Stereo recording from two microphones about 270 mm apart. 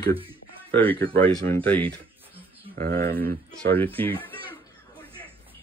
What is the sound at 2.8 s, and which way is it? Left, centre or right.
Speech, right.